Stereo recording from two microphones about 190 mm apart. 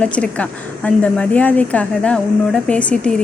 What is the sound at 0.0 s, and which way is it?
A woman's voice, 5° left (ahead or behind).